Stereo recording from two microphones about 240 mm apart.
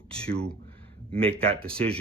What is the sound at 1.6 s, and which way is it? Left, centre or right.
Speech, centre.